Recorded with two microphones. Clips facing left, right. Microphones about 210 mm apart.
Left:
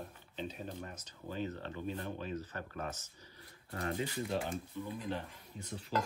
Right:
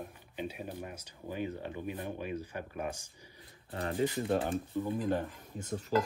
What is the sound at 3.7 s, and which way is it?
Speech, 30° right (ahead or behind).